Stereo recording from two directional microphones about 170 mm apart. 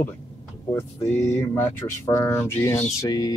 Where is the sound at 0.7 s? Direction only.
15° left (ahead or behind).